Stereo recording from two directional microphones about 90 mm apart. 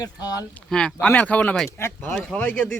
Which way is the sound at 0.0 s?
45° left (ahead or behind).